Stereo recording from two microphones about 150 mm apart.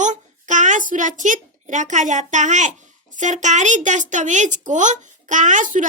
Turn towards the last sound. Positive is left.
turn(degrees=-60)  # may be behind; listen again after turning